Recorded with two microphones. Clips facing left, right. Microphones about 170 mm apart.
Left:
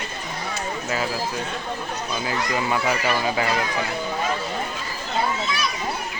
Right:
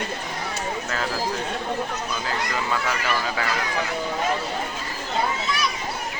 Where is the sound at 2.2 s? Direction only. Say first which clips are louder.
Left 4 dB; 15° left (ahead or behind).